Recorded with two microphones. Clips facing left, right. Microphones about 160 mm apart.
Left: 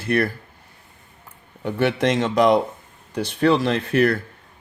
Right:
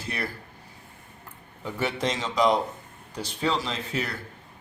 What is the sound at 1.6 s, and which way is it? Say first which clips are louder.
Speech: left 8 dB; 65° left (ahead or behind).